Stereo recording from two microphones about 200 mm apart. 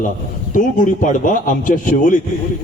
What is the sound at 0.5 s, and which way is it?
A man's voice, 40° left (ahead or behind).